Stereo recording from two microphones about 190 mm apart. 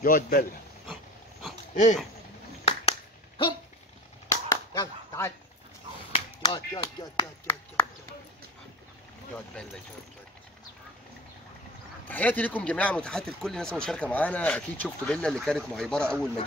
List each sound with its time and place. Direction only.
0.0 s a man's voice: 50° left (ahead or behind)
2.6 s a sound: 30° left (ahead or behind)
4.3 s chop: 15° left (ahead or behind)
6.4 s speech: 20° left (ahead or behind)
9.3 s speech: 5° left (ahead or behind)
12.1 s speech: 10° left (ahead or behind)